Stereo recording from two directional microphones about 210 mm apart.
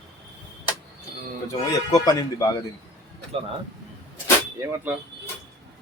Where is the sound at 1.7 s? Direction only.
15° left (ahead or behind).